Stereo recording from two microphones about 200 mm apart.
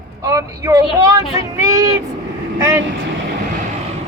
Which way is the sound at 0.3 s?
15° right (ahead or behind).